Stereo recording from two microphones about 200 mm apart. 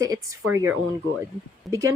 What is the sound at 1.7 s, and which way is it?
Speech, 15° right (ahead or behind).